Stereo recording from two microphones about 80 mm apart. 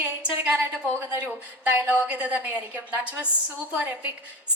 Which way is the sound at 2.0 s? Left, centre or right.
Centre.